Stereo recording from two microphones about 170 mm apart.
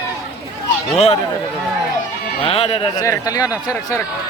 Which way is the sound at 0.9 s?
35° left (ahead or behind).